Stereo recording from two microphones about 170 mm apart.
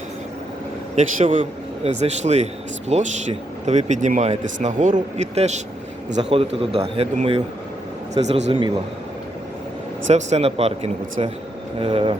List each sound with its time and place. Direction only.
1.2 s a man's voice: 35° right (ahead or behind)
10.1 s a man's voice: 40° right (ahead or behind)